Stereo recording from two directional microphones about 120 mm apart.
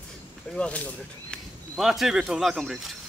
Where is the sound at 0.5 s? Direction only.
10° left (ahead or behind).